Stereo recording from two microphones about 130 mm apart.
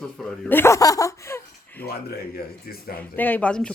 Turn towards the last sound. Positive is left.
turn(degrees=10)  # may be behind; listen again after turning